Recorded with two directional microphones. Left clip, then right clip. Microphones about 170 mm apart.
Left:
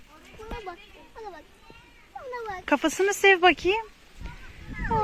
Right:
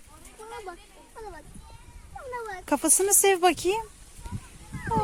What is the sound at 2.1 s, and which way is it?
Speech, centre (ahead or behind).